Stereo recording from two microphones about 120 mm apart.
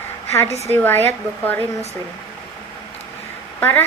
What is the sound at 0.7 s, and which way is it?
Speech, 20° left (ahead or behind).